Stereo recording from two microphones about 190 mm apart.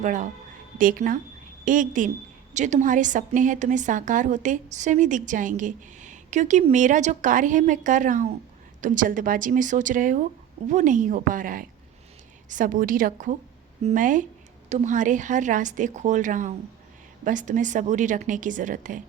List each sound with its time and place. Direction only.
0.0 s a woman's voice: 40° right (ahead or behind)